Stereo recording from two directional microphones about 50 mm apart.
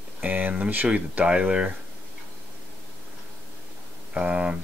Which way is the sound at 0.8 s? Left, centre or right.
Right.